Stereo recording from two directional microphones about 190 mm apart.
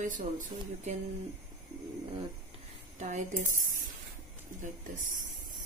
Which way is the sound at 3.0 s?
40° right (ahead or behind).